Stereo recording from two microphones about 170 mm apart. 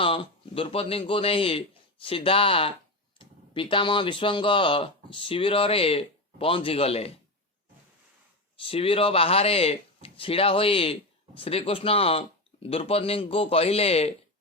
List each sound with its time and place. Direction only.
0.0 s speech: 30° left (ahead or behind)
8.6 s speech: 35° left (ahead or behind)